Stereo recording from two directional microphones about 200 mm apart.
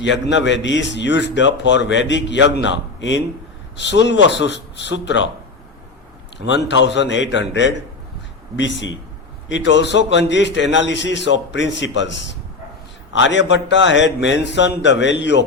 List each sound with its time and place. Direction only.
0.0 s a man's voice: 65° left (ahead or behind)
6.5 s a man's voice: 60° left (ahead or behind)